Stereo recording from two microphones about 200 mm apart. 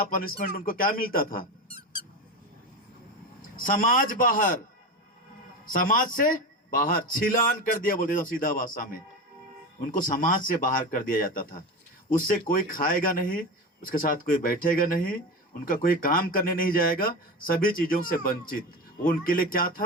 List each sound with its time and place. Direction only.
0.1 s a man's voice: 45° left (ahead or behind)
3.5 s a man's voice: 45° left (ahead or behind)
5.6 s a man's voice: 45° left (ahead or behind)